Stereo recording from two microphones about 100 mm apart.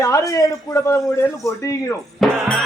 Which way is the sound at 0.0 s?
30° left (ahead or behind).